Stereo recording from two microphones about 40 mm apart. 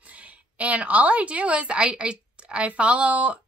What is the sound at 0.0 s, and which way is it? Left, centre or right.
A woman's voice, right.